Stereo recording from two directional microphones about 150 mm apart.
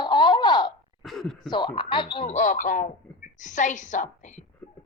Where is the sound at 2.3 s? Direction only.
55° left (ahead or behind).